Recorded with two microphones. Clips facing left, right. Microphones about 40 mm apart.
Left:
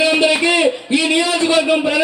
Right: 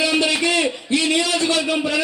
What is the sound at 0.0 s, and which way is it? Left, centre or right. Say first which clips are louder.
A man's voice: left 5 dB; centre.